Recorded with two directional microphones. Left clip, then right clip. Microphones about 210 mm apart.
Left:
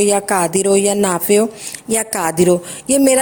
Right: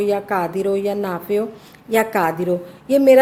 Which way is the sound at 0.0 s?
45° left (ahead or behind).